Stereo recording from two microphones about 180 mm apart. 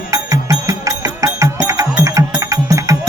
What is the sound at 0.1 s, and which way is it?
Music, 20° right (ahead or behind).